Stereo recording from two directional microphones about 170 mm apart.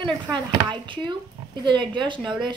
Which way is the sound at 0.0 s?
25° right (ahead or behind).